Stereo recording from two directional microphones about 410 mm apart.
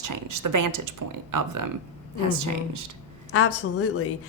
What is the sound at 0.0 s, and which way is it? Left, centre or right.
Speech, right.